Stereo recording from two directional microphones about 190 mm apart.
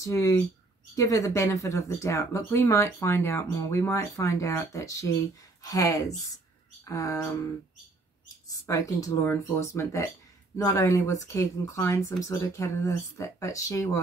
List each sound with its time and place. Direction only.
0.0 s speech: 15° left (ahead or behind)
8.5 s speech: 15° left (ahead or behind)